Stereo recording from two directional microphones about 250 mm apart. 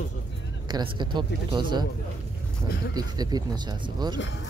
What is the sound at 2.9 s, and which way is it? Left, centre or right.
Speech, centre.